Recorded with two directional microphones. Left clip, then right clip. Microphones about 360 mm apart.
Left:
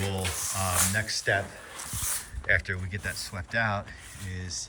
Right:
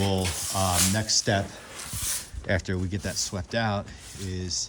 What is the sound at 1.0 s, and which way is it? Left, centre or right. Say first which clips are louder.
Rub: right 5 dB; centre.